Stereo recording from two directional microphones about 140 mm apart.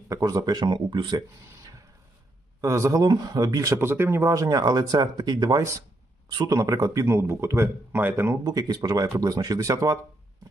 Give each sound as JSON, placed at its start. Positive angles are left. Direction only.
{"t": 0.1, "sound": "speech", "side_deg": -25}
{"t": 2.6, "sound": "speech", "side_deg": -20}